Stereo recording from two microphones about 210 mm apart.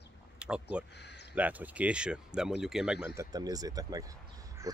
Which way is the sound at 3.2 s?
15° right (ahead or behind).